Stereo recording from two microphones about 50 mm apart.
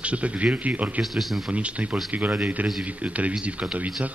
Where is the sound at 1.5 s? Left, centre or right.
Right.